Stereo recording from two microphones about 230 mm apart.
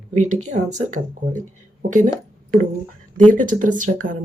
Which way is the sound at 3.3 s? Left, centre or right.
Right.